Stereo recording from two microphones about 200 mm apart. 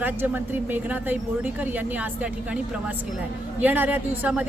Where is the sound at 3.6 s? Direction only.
10° right (ahead or behind).